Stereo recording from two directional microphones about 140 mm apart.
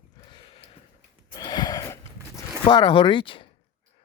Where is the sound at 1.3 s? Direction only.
30° left (ahead or behind).